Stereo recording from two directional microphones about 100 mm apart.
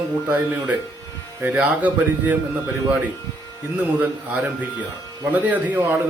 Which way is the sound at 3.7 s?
15° right (ahead or behind).